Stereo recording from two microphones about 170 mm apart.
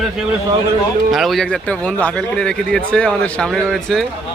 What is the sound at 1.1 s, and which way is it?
Speech, centre (ahead or behind).